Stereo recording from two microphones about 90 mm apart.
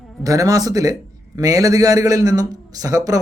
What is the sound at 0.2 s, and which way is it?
A man's voice, 40° right (ahead or behind).